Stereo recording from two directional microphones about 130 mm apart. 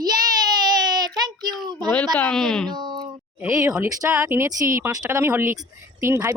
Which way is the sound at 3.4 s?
20° right (ahead or behind).